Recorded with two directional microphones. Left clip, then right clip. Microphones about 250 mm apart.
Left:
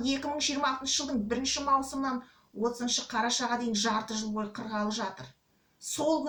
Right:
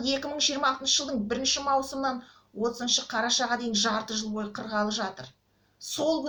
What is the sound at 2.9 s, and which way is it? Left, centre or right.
A woman's voice, centre.